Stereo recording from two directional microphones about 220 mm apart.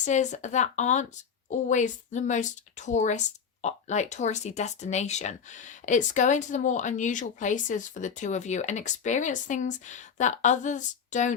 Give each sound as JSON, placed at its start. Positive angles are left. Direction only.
{"t": 0.0, "sound": "speech", "side_deg": 35}